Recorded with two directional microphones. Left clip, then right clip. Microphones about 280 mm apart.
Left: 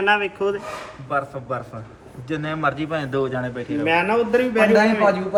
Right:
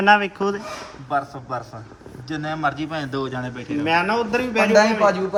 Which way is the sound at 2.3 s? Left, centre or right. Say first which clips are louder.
Left 1 dB; centre.